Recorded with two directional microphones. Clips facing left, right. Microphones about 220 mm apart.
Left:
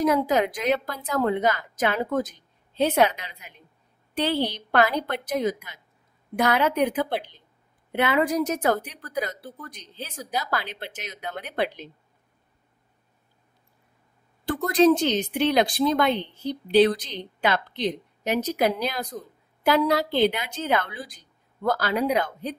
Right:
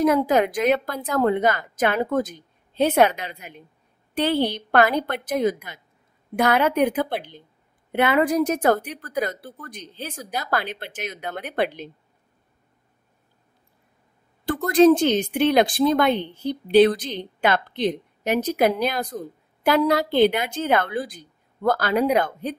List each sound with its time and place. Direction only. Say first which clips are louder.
0.0 s a woman's voice: right 3 dB; 55° right (ahead or behind)
14.7 s a woman's voice: right 4 dB; 50° right (ahead or behind)